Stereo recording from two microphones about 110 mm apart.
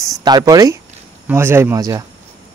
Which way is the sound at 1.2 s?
20° right (ahead or behind).